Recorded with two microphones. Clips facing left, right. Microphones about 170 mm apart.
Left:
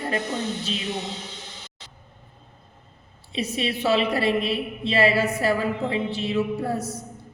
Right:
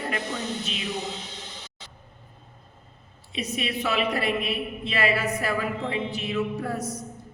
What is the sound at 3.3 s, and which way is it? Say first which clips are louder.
A woman's voice: left 3 dB; 30° left (ahead or behind).